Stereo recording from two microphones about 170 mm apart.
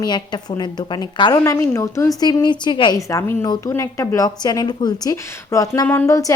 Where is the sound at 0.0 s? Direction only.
25° left (ahead or behind).